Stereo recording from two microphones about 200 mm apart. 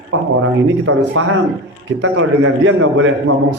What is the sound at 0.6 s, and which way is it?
Speech, 70° right (ahead or behind).